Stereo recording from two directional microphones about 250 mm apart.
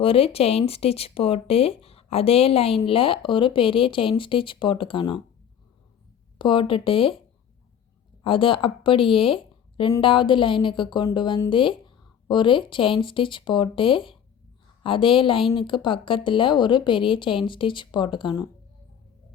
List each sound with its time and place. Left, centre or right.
0.0 s a woman's voice: left
6.4 s speech: left
8.2 s speech: left